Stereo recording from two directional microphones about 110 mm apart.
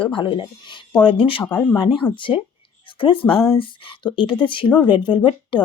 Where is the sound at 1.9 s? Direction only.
50° left (ahead or behind).